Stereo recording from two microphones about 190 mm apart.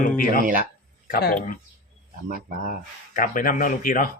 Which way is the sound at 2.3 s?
45° right (ahead or behind).